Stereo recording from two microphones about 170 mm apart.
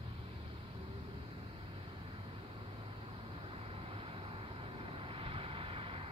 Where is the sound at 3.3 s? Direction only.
35° right (ahead or behind).